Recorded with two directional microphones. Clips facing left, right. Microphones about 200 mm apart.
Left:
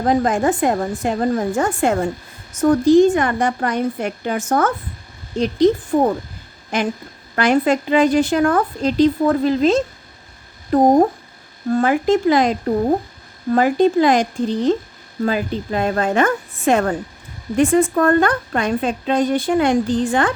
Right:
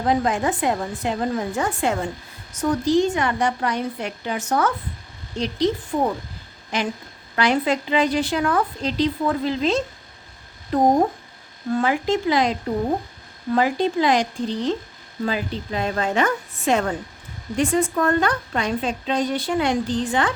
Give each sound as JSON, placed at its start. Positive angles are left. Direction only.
{"t": 0.0, "sound": "speech", "side_deg": 45}